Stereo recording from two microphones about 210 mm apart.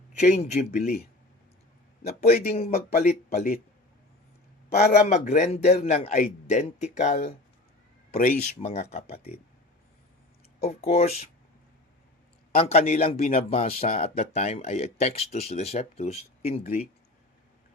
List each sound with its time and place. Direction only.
0.2 s speech: 35° left (ahead or behind)
2.5 s speech: 30° left (ahead or behind)
4.7 s a man's voice: 50° left (ahead or behind)
5.0 s speech: 35° left (ahead or behind)
10.6 s speech: 30° left (ahead or behind)
12.5 s speech: 30° left (ahead or behind)